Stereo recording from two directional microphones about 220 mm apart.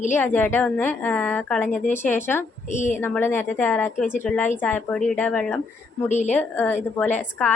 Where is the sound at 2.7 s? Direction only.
35° left (ahead or behind).